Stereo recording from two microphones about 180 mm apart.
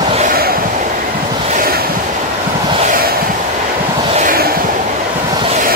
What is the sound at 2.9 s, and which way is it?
Vehicle, 55° right (ahead or behind).